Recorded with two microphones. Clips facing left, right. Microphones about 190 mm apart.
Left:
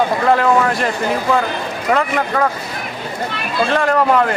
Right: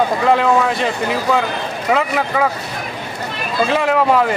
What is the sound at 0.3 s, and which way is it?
Speech, centre (ahead or behind).